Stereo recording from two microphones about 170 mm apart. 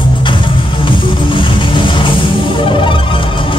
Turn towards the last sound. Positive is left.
turn(degrees=30)  # may be behind; listen again after turning